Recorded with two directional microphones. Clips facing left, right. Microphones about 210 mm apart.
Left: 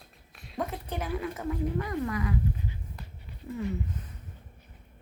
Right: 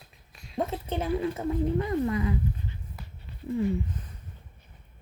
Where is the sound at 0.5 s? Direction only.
25° right (ahead or behind).